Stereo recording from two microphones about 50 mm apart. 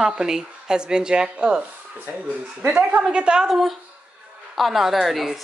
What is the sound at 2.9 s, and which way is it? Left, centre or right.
Speech, right.